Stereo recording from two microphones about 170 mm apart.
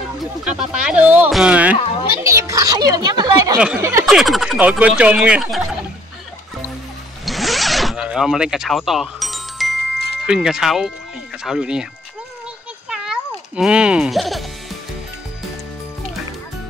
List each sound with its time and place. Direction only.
0.2 s speech: 5° right (ahead or behind)
1.8 s speech: 30° left (ahead or behind)
2.2 s a child's voice: 20° right (ahead or behind)
3.5 s speech: 5° right (ahead or behind)
7.2 s zipper: centre (ahead or behind)
10.2 s speech: 5° right (ahead or behind)
12.9 s music: 5° right (ahead or behind)